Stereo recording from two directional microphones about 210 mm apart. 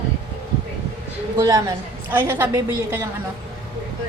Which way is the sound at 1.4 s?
15° right (ahead or behind).